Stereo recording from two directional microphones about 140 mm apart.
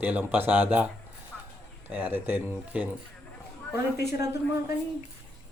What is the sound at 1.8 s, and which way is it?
Speech, 15° right (ahead or behind).